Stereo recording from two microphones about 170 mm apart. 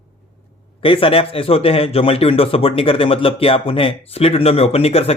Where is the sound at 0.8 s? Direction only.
30° left (ahead or behind).